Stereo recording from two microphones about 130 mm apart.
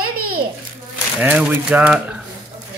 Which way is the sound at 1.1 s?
10° right (ahead or behind).